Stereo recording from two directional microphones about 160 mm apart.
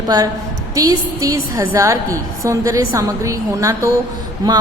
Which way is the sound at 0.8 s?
20° right (ahead or behind).